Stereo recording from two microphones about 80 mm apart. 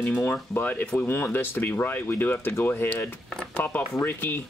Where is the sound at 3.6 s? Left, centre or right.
Left.